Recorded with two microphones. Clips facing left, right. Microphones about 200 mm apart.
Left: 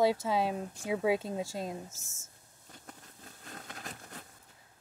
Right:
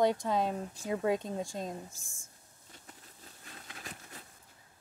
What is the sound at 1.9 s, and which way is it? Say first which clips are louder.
Speech: left 1 dB; 20° left (ahead or behind).